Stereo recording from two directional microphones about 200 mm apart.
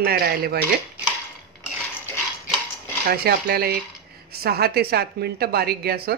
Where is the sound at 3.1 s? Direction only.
50° right (ahead or behind).